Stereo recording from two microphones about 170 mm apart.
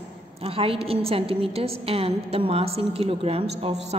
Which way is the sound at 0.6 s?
35° right (ahead or behind).